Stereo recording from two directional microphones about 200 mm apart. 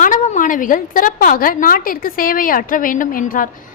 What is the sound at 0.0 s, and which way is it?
A woman's voice, 40° left (ahead or behind).